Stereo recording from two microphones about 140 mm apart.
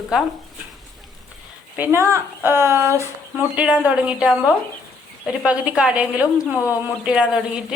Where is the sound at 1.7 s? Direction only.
15° right (ahead or behind).